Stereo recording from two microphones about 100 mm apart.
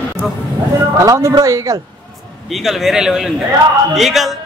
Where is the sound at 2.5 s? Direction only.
Centre (ahead or behind).